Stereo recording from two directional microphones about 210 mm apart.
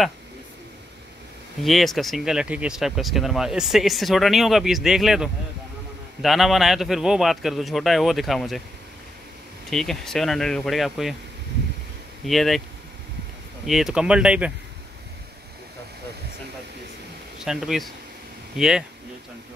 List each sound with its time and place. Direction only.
1.6 s speech: centre (ahead or behind)
9.7 s speech: centre (ahead or behind)
12.3 s speech: centre (ahead or behind)
13.7 s speech: centre (ahead or behind)
17.4 s speech: centre (ahead or behind)